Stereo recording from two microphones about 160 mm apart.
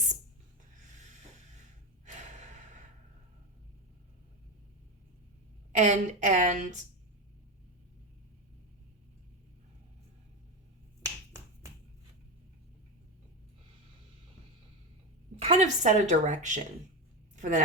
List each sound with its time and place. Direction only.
2.0 s breathing: 45° right (ahead or behind)
5.7 s a woman's voice: 50° right (ahead or behind)
11.0 s finger snapping: 20° right (ahead or behind)
15.4 s a woman's voice: 40° right (ahead or behind)
17.3 s a sound: 50° right (ahead or behind)